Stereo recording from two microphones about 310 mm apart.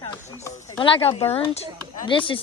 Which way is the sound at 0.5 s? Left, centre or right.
Centre.